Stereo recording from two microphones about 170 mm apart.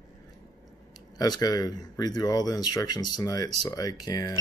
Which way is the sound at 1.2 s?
20° left (ahead or behind).